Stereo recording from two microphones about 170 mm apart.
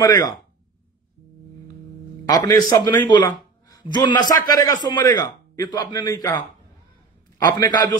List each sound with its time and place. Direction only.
0.0 s a man's voice: 20° left (ahead or behind)
2.2 s a man's voice: 25° left (ahead or behind)
7.4 s a man's voice: 25° left (ahead or behind)